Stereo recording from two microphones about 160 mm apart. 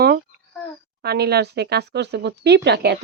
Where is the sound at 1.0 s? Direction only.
90° right.